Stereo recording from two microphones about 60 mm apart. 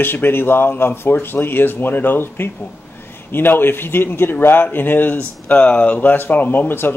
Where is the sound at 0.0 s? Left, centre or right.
Left.